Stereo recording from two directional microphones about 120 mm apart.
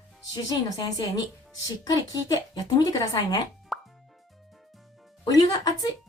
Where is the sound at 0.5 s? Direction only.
35° left (ahead or behind).